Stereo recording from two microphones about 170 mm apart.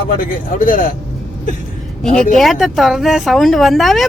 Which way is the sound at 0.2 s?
55° left (ahead or behind).